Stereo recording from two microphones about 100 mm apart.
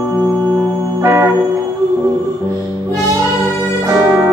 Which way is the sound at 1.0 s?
25° right (ahead or behind).